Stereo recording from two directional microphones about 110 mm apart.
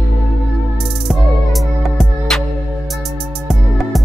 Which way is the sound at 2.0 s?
Centre (ahead or behind).